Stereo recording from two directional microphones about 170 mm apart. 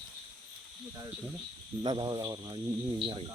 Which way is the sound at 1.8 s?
25° right (ahead or behind).